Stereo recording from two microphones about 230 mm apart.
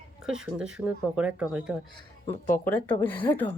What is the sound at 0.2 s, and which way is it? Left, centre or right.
A woman's voice, centre.